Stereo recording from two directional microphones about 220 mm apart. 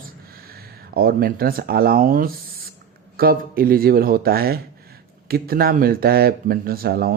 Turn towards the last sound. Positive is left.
turn(degrees=-40)  # may be behind; listen again after turning